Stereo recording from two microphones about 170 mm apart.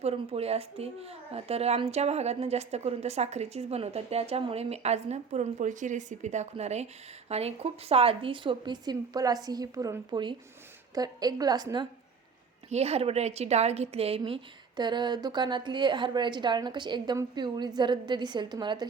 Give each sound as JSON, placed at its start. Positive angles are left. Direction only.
{"t": 0.0, "sound": "a child's voice", "side_deg": -35}
{"t": 12.7, "sound": "a woman's voice", "side_deg": -35}